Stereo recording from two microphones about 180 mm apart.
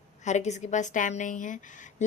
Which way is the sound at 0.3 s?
40° left (ahead or behind).